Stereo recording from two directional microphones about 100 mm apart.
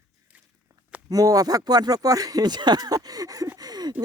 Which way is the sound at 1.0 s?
35° right (ahead or behind).